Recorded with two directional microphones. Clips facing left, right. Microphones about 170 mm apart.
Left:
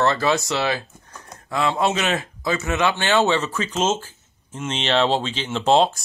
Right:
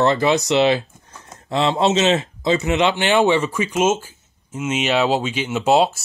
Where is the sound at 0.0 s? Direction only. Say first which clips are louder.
Right 3 dB; 20° right (ahead or behind).